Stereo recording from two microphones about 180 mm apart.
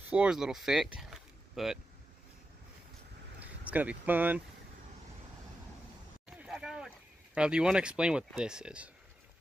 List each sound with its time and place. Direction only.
0.1 s speech: 5° right (ahead or behind)
3.3 s speech: 10° right (ahead or behind)
6.2 s a sound: 5° right (ahead or behind)
7.3 s speech: 5° right (ahead or behind)